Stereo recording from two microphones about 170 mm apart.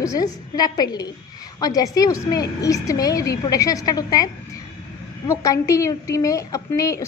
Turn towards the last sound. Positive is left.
turn(degrees=20)  # may be behind; listen again after turning